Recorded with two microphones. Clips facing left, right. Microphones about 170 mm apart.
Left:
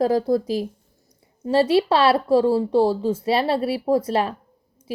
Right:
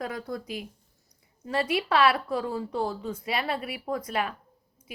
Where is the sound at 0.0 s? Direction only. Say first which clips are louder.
Left 15 dB; 35° left (ahead or behind).